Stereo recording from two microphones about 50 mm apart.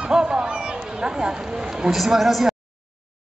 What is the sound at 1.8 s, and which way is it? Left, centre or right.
Speech, centre.